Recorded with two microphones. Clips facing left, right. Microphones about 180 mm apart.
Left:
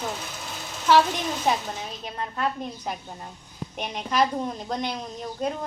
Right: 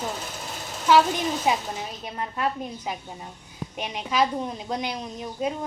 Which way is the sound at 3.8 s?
5° right (ahead or behind).